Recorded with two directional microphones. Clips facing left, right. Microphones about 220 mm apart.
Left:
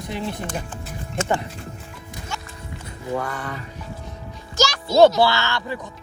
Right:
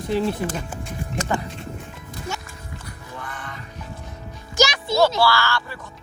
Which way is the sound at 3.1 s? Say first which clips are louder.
Left 10 dB; 45° left (ahead or behind).